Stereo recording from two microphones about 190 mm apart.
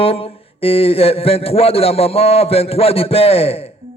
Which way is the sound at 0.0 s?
30° left (ahead or behind).